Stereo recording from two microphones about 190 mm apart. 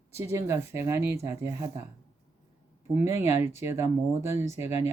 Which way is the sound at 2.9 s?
15° right (ahead or behind).